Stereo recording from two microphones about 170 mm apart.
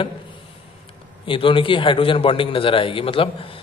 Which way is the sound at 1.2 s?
30° left (ahead or behind).